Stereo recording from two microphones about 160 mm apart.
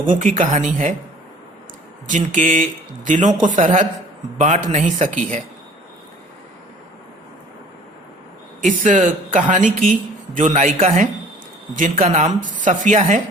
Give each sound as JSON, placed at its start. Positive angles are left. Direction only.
{"t": 0.0, "sound": "speech", "side_deg": -55}
{"t": 2.0, "sound": "speech", "side_deg": -50}
{"t": 8.6, "sound": "speech", "side_deg": -50}